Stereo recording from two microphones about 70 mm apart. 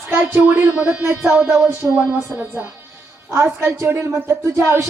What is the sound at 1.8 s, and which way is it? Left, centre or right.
Speech, right.